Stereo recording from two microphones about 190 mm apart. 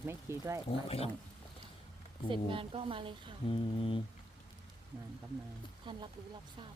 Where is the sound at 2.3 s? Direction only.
25° right (ahead or behind).